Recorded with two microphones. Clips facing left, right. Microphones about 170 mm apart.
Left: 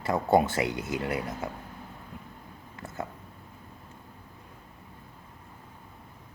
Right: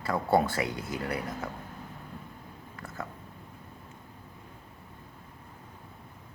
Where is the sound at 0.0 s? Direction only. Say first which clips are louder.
Left 2 dB; 20° left (ahead or behind).